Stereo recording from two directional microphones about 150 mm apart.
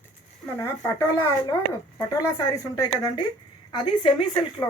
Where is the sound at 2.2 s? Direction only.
20° left (ahead or behind).